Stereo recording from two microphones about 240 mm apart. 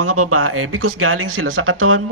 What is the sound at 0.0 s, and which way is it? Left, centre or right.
A woman's voice, right.